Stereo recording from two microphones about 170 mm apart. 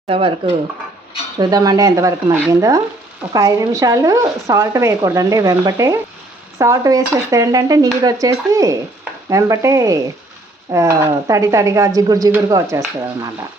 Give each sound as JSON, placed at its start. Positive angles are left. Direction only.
{"t": 0.1, "sound": "speech", "side_deg": -30}
{"t": 1.4, "sound": "speech", "side_deg": -20}